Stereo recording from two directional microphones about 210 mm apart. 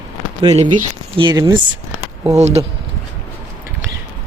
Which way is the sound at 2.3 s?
30° right (ahead or behind).